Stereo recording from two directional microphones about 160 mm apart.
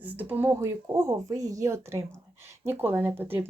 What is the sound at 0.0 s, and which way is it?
Speech, 10° right (ahead or behind).